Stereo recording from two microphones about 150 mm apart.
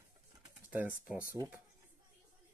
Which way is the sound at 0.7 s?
10° right (ahead or behind).